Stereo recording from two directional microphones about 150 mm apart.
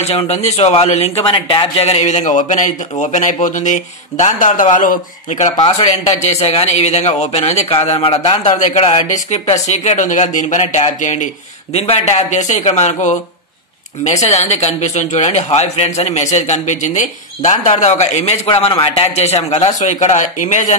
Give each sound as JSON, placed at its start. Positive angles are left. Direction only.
{"t": 0.0, "sound": "a man's voice", "side_deg": 45}
{"t": 5.6, "sound": "a man's voice", "side_deg": 40}
{"t": 11.7, "sound": "a man's voice", "side_deg": 45}
{"t": 14.3, "sound": "a man's voice", "side_deg": 50}